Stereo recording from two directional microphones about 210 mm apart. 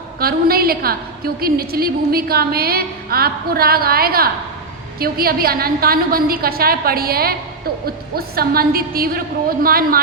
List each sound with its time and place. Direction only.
0.2 s a woman's voice: 45° right (ahead or behind)